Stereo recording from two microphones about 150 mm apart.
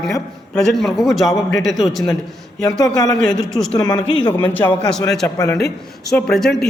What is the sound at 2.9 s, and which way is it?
Speech, 25° left (ahead or behind).